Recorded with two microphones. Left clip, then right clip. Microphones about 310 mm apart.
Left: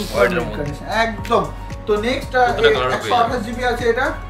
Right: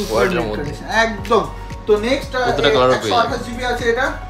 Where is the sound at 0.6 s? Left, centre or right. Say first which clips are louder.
Right 3 dB; centre.